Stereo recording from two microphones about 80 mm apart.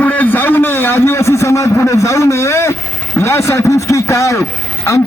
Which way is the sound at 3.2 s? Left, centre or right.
Left.